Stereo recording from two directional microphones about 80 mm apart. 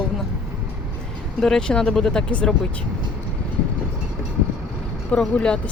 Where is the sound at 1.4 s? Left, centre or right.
Centre.